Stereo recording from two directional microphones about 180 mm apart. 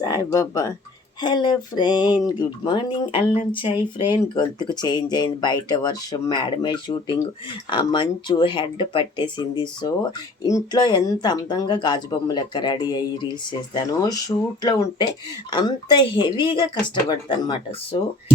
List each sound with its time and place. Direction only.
0.0 s speech: 20° left (ahead or behind)